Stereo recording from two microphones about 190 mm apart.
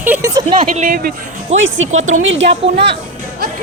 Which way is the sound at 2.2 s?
80° right.